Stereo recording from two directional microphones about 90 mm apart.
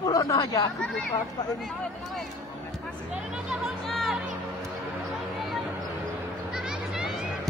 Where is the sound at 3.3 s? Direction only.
5° right (ahead or behind).